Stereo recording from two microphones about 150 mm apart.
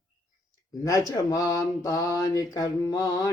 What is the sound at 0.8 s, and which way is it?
Speech, 20° left (ahead or behind).